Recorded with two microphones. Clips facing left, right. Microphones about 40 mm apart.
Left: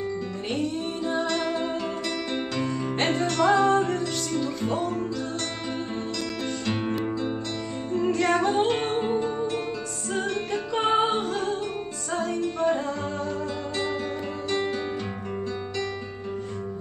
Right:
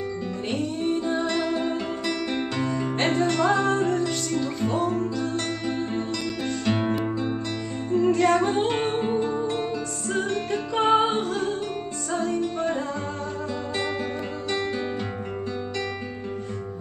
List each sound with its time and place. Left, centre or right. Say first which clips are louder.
1.3 s music: right 1 dB; centre
3.0 s music: right 1 dB; centre
6.6 s music: right 4 dB; centre